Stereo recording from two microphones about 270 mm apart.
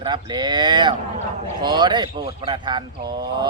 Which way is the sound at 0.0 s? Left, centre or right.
Centre.